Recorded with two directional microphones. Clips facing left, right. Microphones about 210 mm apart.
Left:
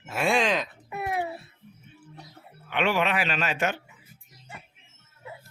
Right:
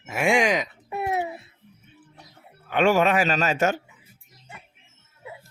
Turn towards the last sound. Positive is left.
turn(degrees=-40)  # may be behind; listen again after turning